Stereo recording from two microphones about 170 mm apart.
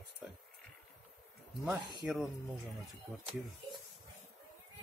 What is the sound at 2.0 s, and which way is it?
Speech, centre (ahead or behind).